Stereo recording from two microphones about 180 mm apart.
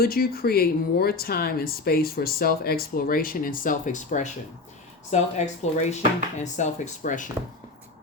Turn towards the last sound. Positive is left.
turn(degrees=45)  # may be behind; listen again after turning